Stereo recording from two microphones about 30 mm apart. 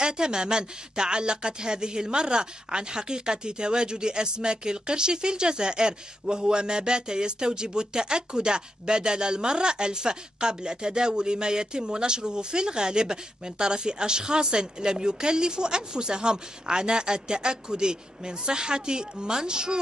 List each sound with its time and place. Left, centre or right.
0.0 s speech: right